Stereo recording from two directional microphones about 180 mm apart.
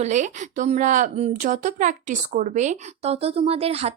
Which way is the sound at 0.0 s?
40° right (ahead or behind).